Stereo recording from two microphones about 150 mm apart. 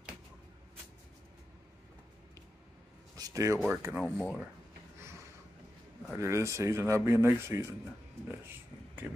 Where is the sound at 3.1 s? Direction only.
25° right (ahead or behind).